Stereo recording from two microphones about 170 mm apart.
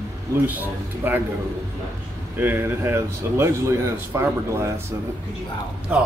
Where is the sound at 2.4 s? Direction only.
10° right (ahead or behind).